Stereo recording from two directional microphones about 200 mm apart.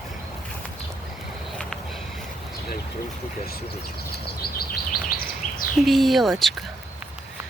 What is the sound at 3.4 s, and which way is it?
Bird vocalization, 50° left (ahead or behind).